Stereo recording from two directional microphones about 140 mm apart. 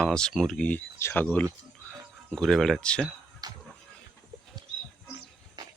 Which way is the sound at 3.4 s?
30° right (ahead or behind).